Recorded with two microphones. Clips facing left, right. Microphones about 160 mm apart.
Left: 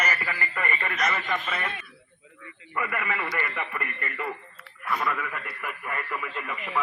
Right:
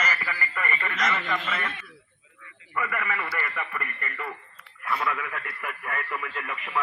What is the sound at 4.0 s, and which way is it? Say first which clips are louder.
Speech: left 3 dB; 10° left (ahead or behind).